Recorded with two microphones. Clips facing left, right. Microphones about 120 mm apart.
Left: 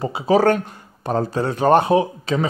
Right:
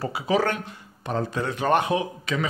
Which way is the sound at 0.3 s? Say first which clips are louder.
Left 8 dB; 40° left (ahead or behind).